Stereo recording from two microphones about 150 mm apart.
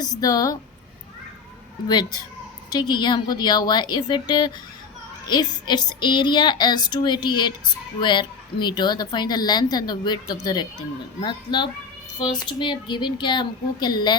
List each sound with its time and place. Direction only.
0.2 s a woman's voice: 25° left (ahead or behind)
1.9 s a woman's voice: 30° left (ahead or behind)